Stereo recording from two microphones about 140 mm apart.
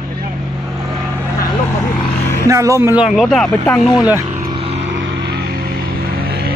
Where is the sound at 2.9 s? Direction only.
5° right (ahead or behind).